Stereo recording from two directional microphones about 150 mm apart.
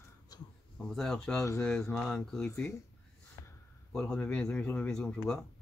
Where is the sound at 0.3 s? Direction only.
25° left (ahead or behind).